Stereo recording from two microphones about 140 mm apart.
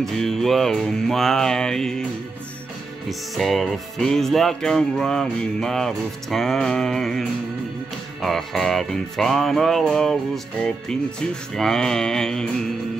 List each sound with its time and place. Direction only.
0.0 s music: 5° left (ahead or behind)
3.1 s music: centre (ahead or behind)